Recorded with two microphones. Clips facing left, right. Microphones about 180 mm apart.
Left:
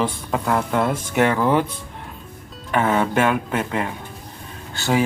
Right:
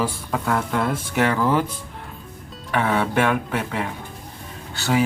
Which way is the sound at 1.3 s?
15° left (ahead or behind).